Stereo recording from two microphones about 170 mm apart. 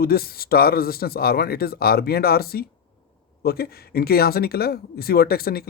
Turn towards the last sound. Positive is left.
turn(degrees=65)  # may be behind; listen again after turning